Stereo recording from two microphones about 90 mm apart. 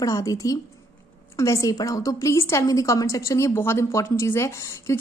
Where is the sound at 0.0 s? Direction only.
40° left (ahead or behind).